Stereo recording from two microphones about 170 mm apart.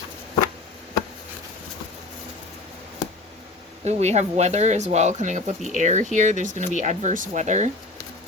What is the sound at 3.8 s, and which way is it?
Speech, 40° right (ahead or behind).